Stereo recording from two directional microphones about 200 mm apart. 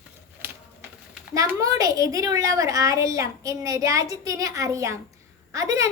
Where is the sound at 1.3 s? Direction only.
15° right (ahead or behind).